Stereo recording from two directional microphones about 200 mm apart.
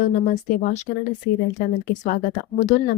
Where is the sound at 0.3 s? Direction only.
40° left (ahead or behind).